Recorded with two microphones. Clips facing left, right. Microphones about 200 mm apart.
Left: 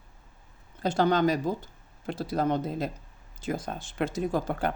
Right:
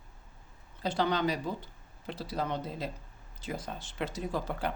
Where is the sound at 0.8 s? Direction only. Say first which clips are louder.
Left 6 dB; 45° left (ahead or behind).